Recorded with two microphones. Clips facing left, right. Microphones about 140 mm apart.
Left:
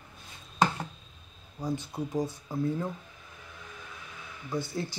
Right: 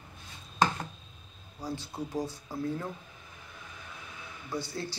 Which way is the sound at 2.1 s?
20° left (ahead or behind).